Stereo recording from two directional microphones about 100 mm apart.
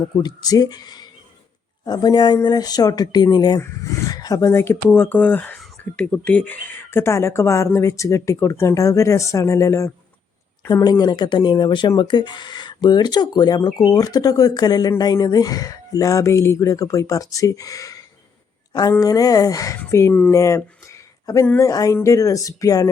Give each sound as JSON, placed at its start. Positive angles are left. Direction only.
{"t": 0.2, "sound": "speech", "side_deg": 40}
{"t": 20.3, "sound": "a sound", "side_deg": 30}
{"t": 21.6, "sound": "speech", "side_deg": 35}